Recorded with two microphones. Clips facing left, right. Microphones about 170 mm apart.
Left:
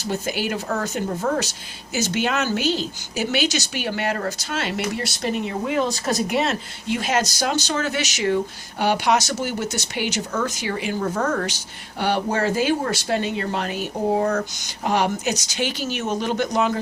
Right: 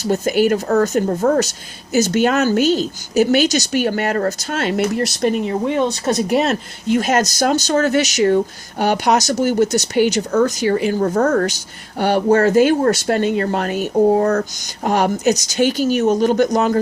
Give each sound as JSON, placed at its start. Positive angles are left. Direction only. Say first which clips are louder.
{"t": 0.0, "sound": "speech", "louder": "right 9 dB", "side_deg": -45}